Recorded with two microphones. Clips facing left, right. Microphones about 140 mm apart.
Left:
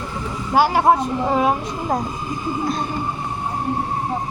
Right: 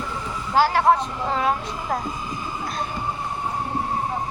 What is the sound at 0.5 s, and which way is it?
A child's voice, 15° left (ahead or behind).